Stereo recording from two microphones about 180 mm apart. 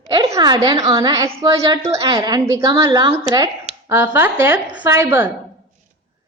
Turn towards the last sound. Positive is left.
turn(degrees=-10)  # may be behind; listen again after turning